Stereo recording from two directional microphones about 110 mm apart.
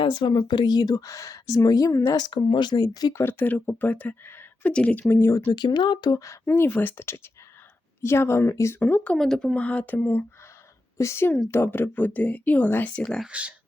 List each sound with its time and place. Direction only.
0.0 s speech: 45° left (ahead or behind); by 2.1 s 30° left (ahead or behind)
2.1 s speech: 45° left (ahead or behind); by 5.0 s 10° left (ahead or behind)
5.0 s speech: 25° left (ahead or behind)
5.5 s speech: 40° left (ahead or behind); by 9.1 s 20° left (ahead or behind)
9.1 s speech: 5° left (ahead or behind)
13.2 s speech: 10° right (ahead or behind)